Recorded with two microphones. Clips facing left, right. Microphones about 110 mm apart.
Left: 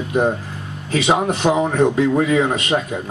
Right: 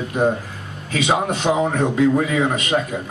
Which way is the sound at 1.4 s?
35° left (ahead or behind).